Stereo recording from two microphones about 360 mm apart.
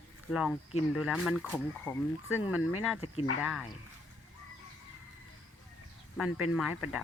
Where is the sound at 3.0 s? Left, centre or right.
Centre.